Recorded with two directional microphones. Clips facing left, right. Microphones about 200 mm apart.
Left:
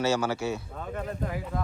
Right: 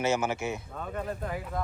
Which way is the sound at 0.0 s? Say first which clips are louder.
Left 2 dB; 20° right (ahead or behind).